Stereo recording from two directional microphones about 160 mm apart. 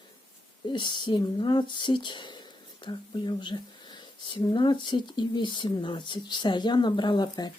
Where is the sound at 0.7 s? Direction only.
30° left (ahead or behind).